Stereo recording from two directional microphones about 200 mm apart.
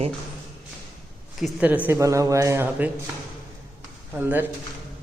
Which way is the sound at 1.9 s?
15° right (ahead or behind).